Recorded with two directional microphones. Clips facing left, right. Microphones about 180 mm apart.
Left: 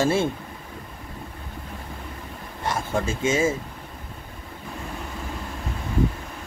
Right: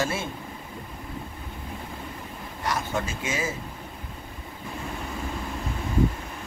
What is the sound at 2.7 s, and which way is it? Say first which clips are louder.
Speech: left 3 dB; 25° left (ahead or behind).